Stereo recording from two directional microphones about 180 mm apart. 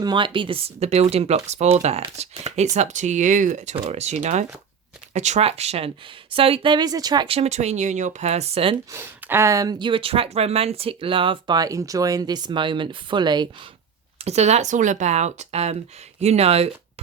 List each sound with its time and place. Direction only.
0.0 s speech: 25° right (ahead or behind)
7.3 s speech: 40° right (ahead or behind)
8.9 s speech: 15° right (ahead or behind)
14.2 s speech: 35° right (ahead or behind)